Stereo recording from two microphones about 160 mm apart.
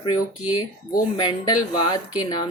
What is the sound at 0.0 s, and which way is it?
A woman's voice, 25° left (ahead or behind).